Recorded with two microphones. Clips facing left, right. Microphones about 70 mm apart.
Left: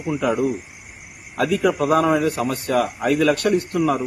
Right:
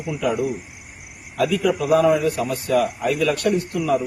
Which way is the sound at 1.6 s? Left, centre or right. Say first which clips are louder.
Even; left.